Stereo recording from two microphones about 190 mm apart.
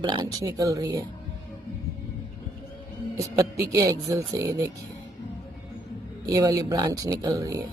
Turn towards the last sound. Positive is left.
turn(degrees=-20)  # may be behind; listen again after turning